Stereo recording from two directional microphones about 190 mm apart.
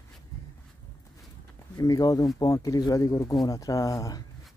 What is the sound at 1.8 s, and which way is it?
Speech, 20° left (ahead or behind).